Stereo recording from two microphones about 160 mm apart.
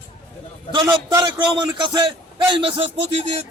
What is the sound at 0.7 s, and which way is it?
A man's voice, 30° right (ahead or behind).